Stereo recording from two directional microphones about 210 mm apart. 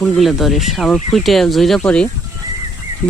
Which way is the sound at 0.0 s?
Centre (ahead or behind).